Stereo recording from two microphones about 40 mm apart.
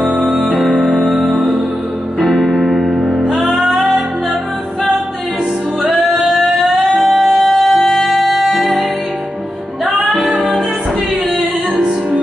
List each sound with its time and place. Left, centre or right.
0.2 s music: centre
5.9 s music: centre
9.8 s music: centre